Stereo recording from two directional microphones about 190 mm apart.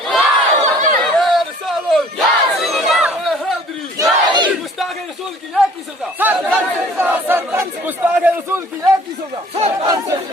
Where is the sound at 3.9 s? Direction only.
20° right (ahead or behind).